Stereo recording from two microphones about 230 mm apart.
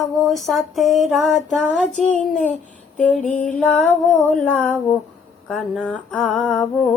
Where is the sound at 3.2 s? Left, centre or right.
Left.